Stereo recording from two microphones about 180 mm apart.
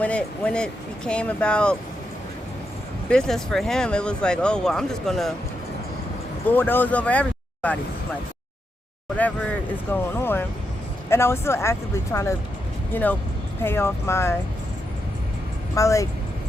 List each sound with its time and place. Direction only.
0.0 s speech: 5° left (ahead or behind)
3.1 s speech: 5° left (ahead or behind)
6.5 s speech: 10° left (ahead or behind)
9.1 s speech: 10° left (ahead or behind)
15.7 s speech: 15° left (ahead or behind)